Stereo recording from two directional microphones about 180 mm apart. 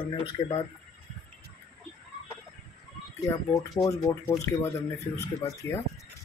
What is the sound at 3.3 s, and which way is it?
Speech, 15° left (ahead or behind).